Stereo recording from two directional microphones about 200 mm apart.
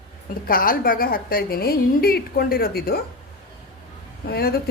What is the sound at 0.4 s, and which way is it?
Speech, 45° left (ahead or behind).